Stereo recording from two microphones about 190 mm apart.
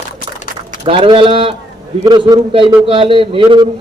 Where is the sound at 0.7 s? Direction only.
30° right (ahead or behind).